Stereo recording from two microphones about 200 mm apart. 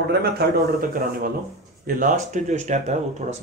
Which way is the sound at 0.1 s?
50° right (ahead or behind).